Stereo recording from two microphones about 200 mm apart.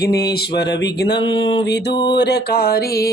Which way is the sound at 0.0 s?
50° left (ahead or behind).